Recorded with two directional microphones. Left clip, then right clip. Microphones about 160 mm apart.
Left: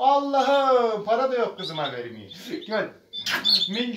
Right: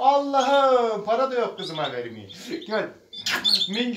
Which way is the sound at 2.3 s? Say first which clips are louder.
Even; centre (ahead or behind).